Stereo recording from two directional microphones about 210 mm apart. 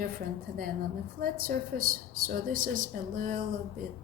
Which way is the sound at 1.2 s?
45° right (ahead or behind).